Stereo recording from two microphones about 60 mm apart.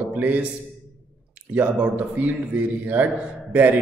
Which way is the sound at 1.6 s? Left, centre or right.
Right.